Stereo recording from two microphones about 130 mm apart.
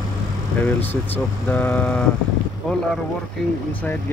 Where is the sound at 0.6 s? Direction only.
15° left (ahead or behind).